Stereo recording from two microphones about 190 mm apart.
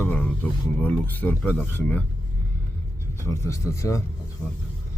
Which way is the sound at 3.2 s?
15° left (ahead or behind).